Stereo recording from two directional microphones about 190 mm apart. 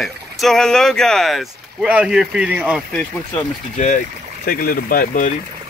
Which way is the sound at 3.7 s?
40° left (ahead or behind).